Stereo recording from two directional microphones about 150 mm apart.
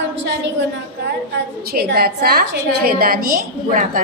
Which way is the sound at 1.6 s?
90° right.